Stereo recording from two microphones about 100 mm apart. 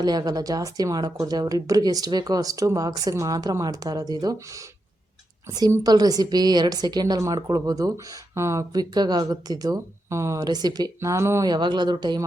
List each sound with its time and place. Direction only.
0.0 s a woman's voice: 45° right (ahead or behind)
8.7 s speech: 45° right (ahead or behind)
10.4 s speech: 45° right (ahead or behind)
11.4 s a woman's voice: 45° right (ahead or behind)